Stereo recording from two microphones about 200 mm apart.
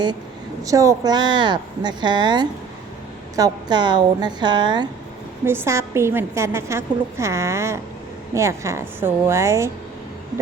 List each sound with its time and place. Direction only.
0.6 s a woman's voice: 15° right (ahead or behind)